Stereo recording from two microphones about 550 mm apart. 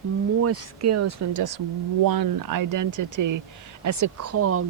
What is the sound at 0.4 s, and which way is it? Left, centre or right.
Speech, right.